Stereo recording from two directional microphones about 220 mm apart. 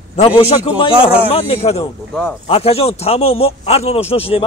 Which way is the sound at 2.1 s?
5° left (ahead or behind).